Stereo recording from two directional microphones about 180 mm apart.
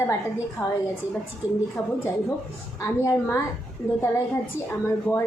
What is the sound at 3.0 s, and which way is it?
Female singing, 15° left (ahead or behind).